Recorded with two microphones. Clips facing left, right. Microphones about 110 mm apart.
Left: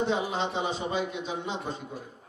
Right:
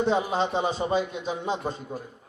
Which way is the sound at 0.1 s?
40° right (ahead or behind).